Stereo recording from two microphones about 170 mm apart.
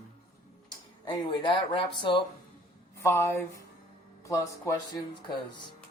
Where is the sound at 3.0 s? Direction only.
15° left (ahead or behind).